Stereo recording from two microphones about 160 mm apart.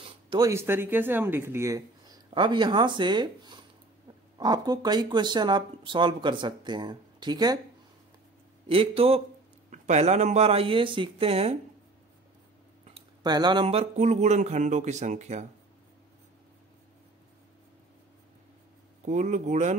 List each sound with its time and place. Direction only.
0.0 s a sound: 30° right (ahead or behind)
0.5 s speech: 15° right (ahead or behind)
8.6 s speech: 35° right (ahead or behind)
12.8 s speech: 30° right (ahead or behind); by 15.4 s 45° right (ahead or behind)
19.0 s speech: 50° right (ahead or behind)